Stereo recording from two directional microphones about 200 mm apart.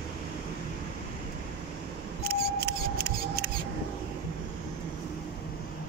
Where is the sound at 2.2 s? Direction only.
55° right (ahead or behind).